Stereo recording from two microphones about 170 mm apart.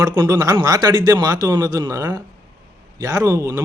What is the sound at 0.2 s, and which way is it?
A man's voice, 20° right (ahead or behind).